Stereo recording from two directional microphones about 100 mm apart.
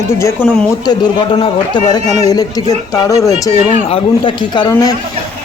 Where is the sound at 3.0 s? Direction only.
35° left (ahead or behind).